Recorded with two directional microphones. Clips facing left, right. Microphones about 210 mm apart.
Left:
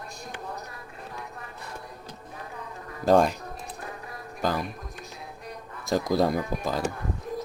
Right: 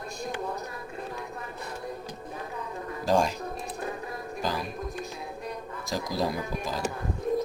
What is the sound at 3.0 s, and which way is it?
Speech, 55° left (ahead or behind).